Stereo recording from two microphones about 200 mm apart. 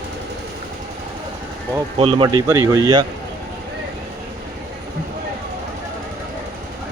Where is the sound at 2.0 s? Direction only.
25° right (ahead or behind).